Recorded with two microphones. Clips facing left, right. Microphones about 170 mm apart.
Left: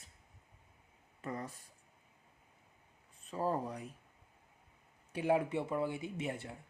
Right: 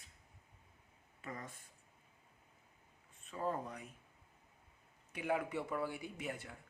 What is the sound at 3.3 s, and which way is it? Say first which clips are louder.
Speech: left 4 dB; 35° left (ahead or behind).